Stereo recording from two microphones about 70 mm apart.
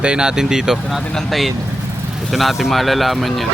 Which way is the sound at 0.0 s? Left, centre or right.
Centre.